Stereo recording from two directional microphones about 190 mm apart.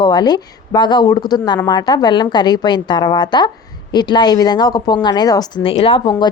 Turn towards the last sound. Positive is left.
turn(degrees=25)  # may be behind; listen again after turning